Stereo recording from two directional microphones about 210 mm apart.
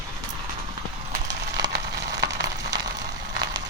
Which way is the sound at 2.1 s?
15° right (ahead or behind).